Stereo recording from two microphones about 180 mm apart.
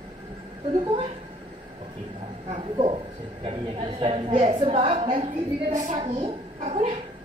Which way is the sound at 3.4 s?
30° right (ahead or behind).